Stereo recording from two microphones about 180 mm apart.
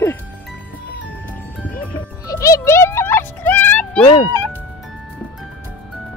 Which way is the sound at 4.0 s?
30° left (ahead or behind).